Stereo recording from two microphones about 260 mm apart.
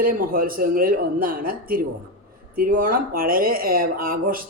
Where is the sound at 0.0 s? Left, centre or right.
Right.